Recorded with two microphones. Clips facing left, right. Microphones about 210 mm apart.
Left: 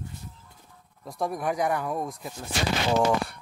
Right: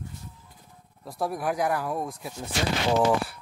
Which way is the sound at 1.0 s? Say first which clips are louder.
Even; 5° right (ahead or behind).